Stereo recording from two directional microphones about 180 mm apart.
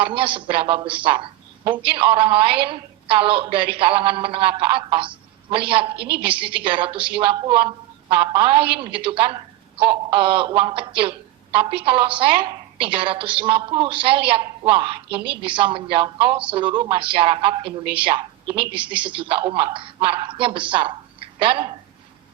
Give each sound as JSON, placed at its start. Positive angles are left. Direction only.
{"t": 0.0, "sound": "a woman's voice", "side_deg": -30}
{"t": 6.0, "sound": "a woman's voice", "side_deg": -65}
{"t": 6.2, "sound": "a woman's voice", "side_deg": -30}